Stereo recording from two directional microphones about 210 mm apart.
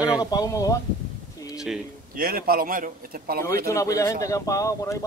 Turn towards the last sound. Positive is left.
turn(degrees=15)  # may be behind; listen again after turning